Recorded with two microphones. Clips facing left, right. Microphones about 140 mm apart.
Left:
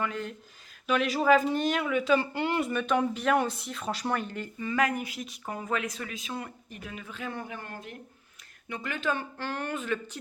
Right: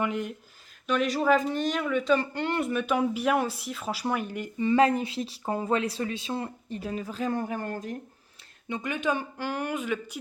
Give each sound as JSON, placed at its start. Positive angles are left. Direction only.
{"t": 0.0, "sound": "speech", "side_deg": -15}
{"t": 0.9, "sound": "speech", "side_deg": 5}
{"t": 4.6, "sound": "speech", "side_deg": -30}
{"t": 8.7, "sound": "speech", "side_deg": -20}